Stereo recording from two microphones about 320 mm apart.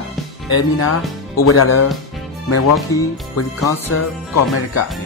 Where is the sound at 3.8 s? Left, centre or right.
Left.